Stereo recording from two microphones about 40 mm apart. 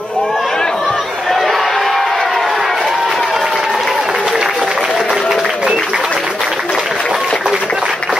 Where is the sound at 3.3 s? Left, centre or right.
Centre.